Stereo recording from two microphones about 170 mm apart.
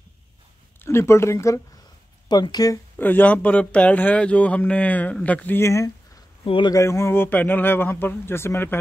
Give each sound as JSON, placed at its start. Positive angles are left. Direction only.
{"t": 0.7, "sound": "a man's voice", "side_deg": 15}
{"t": 3.0, "sound": "a man's voice", "side_deg": 10}
{"t": 6.4, "sound": "a man's voice", "side_deg": 30}